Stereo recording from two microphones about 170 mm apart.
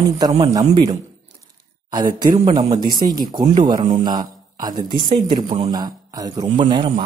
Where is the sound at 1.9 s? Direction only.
25° right (ahead or behind).